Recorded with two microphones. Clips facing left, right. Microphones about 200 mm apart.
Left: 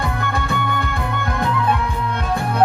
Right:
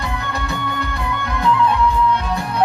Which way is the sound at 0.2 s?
50° left (ahead or behind).